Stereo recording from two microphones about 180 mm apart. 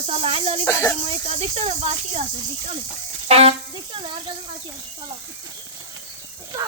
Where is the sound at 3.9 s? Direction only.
30° right (ahead or behind).